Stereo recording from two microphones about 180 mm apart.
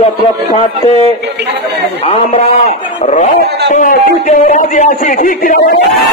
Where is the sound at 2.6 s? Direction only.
40° left (ahead or behind).